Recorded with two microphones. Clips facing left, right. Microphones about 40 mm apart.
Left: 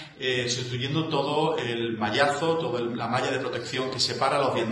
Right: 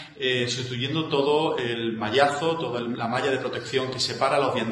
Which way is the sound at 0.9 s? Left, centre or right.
Centre.